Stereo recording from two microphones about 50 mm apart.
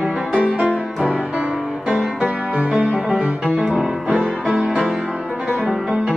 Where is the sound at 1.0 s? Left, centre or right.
Centre.